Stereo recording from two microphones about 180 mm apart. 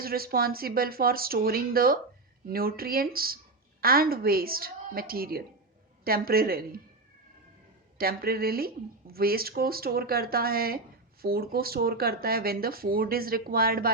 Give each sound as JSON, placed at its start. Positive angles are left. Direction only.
{"t": 0.0, "sound": "speech", "side_deg": -55}
{"t": 7.9, "sound": "speech", "side_deg": -55}